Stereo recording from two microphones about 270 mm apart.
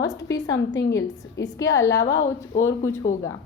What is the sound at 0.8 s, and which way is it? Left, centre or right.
Speech, left.